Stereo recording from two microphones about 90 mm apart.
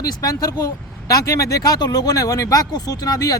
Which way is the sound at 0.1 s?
40° left (ahead or behind).